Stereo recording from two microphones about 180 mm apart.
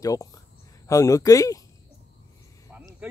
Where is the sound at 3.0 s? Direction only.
5° right (ahead or behind).